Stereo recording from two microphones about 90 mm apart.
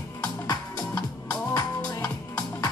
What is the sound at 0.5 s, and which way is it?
Music, 50° left (ahead or behind).